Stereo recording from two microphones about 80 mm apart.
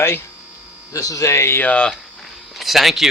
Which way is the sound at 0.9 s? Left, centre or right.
Left.